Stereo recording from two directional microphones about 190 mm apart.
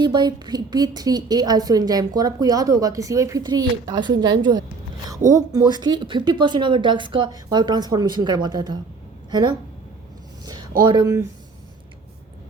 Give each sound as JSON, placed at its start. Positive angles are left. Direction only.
{"t": 0.0, "sound": "a woman's voice", "side_deg": -25}